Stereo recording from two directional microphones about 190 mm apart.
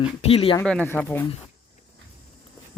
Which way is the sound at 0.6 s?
5° left (ahead or behind).